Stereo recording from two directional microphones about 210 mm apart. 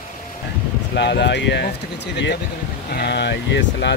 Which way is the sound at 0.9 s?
55° left (ahead or behind).